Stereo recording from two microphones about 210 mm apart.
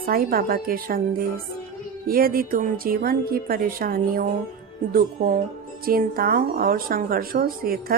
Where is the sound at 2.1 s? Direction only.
45° right (ahead or behind).